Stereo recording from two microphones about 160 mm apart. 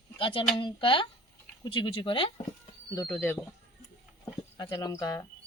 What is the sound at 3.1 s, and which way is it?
Speech, 15° left (ahead or behind).